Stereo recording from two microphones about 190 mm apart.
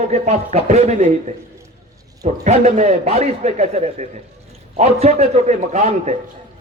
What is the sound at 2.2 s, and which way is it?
A man's voice, 35° right (ahead or behind).